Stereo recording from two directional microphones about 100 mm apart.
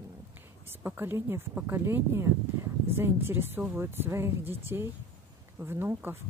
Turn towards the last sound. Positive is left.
turn(degrees=-25)  # may be behind; listen again after turning